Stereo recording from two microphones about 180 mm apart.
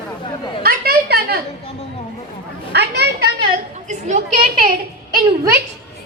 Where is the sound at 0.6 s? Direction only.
60° right (ahead or behind).